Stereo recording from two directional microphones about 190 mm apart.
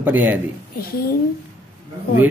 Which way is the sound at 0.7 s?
55° left (ahead or behind).